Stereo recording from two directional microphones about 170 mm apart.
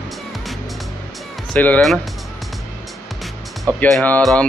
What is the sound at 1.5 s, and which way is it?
Speech, 10° left (ahead or behind).